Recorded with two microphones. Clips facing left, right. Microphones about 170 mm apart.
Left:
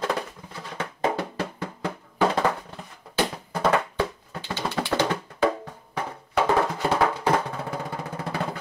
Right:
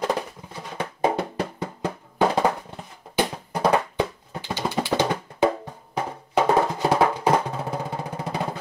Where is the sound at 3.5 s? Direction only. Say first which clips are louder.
Right 2 dB; 15° right (ahead or behind).